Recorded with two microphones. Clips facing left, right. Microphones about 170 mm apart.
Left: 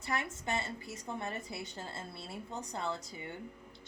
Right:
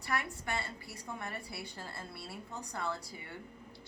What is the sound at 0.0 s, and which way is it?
A woman's voice, 20° left (ahead or behind).